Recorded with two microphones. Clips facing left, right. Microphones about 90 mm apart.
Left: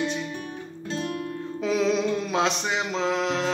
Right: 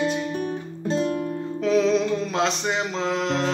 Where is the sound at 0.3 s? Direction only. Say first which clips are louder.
Right 8 dB; 50° right (ahead or behind).